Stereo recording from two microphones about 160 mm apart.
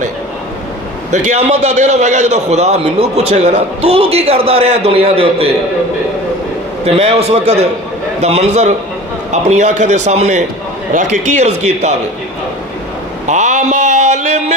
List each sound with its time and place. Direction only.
1.1 s a man's voice: 45° right (ahead or behind)
6.8 s a man's voice: 35° right (ahead or behind)
13.3 s a sound: 45° right (ahead or behind)